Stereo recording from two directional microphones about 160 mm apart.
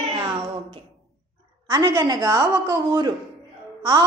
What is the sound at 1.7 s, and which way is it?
A man's voice, 25° right (ahead or behind).